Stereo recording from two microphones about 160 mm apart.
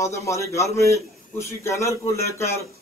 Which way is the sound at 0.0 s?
20° left (ahead or behind).